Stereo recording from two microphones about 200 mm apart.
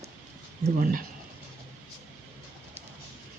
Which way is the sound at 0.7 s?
45° right (ahead or behind).